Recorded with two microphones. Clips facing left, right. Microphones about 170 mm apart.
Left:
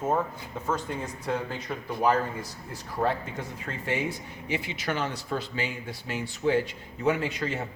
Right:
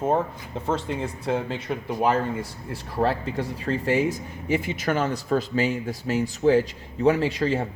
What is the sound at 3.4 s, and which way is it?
Speech, 35° right (ahead or behind).